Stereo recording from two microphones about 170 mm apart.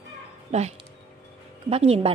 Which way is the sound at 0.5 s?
40° right (ahead or behind).